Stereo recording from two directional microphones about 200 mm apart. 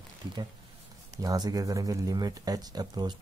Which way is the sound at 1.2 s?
20° right (ahead or behind).